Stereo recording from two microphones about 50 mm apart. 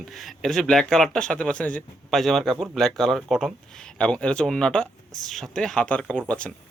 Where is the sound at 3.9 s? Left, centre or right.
Left.